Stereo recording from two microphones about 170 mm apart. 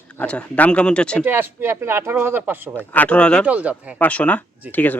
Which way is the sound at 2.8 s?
10° left (ahead or behind).